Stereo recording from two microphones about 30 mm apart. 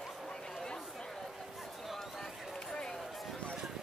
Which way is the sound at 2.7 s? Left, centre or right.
Left.